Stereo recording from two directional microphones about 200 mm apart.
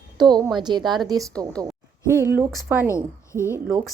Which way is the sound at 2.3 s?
5° right (ahead or behind).